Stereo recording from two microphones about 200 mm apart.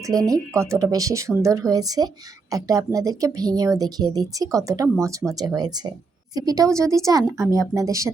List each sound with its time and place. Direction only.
0.1 s a woman's voice: 15° right (ahead or behind)